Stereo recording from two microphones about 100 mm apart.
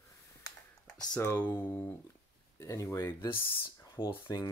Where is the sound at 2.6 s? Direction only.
30° left (ahead or behind).